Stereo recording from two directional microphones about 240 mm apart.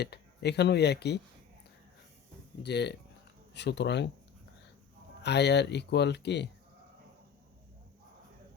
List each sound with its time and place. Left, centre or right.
0.0 s speech: left
2.6 s speech: left
5.2 s speech: left